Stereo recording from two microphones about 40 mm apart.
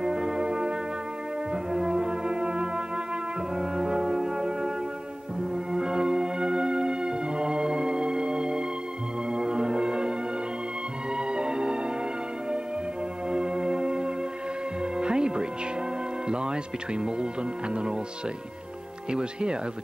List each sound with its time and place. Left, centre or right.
0.0 s music: centre
11.1 s music: right
13.3 s music: right
16.3 s speech: right
19.0 s speech: right